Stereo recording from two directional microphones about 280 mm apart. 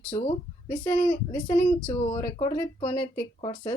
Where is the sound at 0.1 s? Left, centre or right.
Centre.